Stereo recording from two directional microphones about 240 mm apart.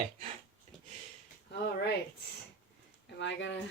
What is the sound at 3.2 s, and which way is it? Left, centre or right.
Speech, left.